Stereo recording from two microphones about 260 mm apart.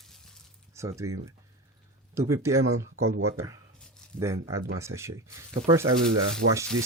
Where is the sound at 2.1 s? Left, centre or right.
Centre.